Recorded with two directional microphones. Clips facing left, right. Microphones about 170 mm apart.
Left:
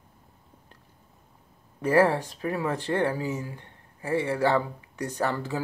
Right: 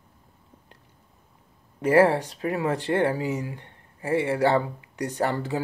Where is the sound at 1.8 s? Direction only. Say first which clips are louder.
Right 3 dB; 20° right (ahead or behind).